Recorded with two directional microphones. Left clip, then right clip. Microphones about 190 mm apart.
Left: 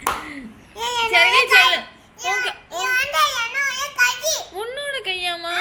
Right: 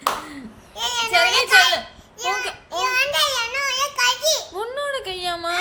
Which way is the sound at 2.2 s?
10° right (ahead or behind).